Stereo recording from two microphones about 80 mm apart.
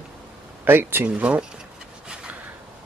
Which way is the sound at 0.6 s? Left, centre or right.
Right.